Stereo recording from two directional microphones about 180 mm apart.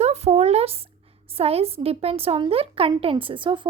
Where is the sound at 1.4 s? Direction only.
35° right (ahead or behind).